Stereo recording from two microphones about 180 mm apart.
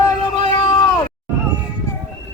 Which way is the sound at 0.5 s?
25° left (ahead or behind).